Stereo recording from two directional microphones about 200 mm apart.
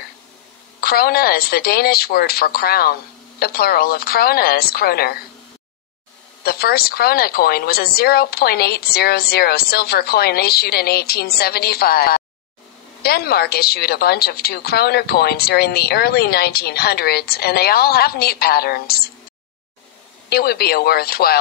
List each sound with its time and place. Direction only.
0.7 s a woman's voice: 50° left (ahead or behind)
6.4 s a woman's voice: 50° left (ahead or behind)
20.2 s a woman's voice: 50° left (ahead or behind)